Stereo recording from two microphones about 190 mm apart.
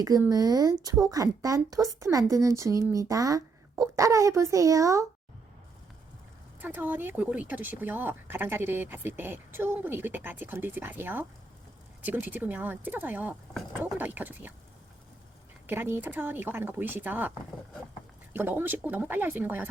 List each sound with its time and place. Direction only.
0.0 s speech: 20° right (ahead or behind)
6.6 s speech: 10° right (ahead or behind)
15.6 s speech: 10° right (ahead or behind)
18.3 s speech: 10° right (ahead or behind)